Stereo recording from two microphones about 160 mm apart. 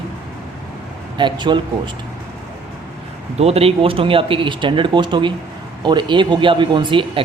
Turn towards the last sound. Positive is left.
turn(degrees=-30)  # may be behind; listen again after turning